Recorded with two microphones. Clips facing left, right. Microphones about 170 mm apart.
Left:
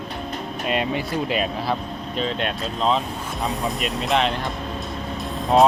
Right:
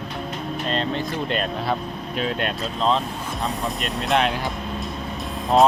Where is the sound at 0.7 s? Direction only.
10° left (ahead or behind).